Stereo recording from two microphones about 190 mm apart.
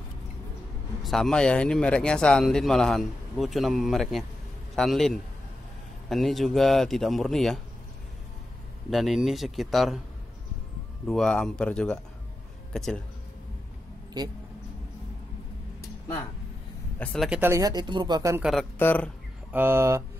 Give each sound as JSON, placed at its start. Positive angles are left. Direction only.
{"t": 1.0, "sound": "speech", "side_deg": 0}
{"t": 8.9, "sound": "speech", "side_deg": 0}
{"t": 11.1, "sound": "speech", "side_deg": 5}
{"t": 14.2, "sound": "speech", "side_deg": -20}
{"t": 17.0, "sound": "speech", "side_deg": 0}
{"t": 17.4, "sound": "speech", "side_deg": -15}
{"t": 18.4, "sound": "speech", "side_deg": 0}
{"t": 19.5, "sound": "speech", "side_deg": -10}